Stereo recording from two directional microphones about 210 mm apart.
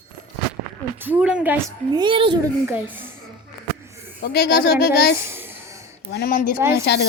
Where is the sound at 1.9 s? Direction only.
20° right (ahead or behind).